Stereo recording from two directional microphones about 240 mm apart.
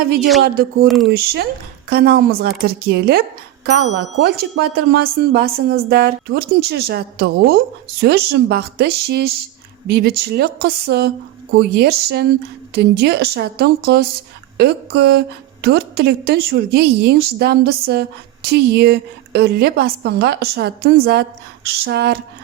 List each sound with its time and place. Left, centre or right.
0.2 s speech: centre
0.4 s a woman's voice: right
0.9 s speech: centre
1.1 s a woman's voice: right